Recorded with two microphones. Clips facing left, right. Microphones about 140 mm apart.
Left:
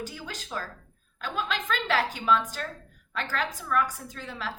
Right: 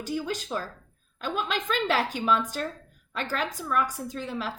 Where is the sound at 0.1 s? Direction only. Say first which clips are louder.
Right 7 dB; 25° right (ahead or behind).